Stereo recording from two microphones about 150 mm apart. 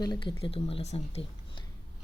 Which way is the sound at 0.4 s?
40° left (ahead or behind).